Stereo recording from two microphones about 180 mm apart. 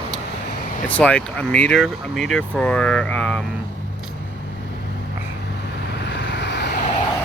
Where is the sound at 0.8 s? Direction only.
5° left (ahead or behind).